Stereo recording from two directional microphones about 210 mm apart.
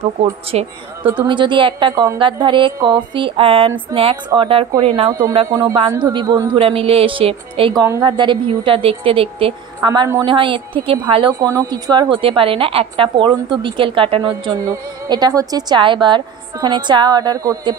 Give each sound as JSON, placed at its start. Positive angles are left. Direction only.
{"t": 0.2, "sound": "a woman's voice", "side_deg": -30}
{"t": 5.5, "sound": "a woman's voice", "side_deg": -15}
{"t": 9.8, "sound": "a woman's voice", "side_deg": -15}